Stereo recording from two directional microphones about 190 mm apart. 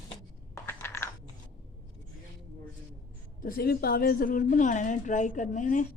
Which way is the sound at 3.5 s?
50° left (ahead or behind).